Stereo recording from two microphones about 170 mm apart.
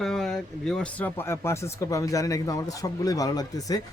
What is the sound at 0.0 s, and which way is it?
Speech, 5° left (ahead or behind).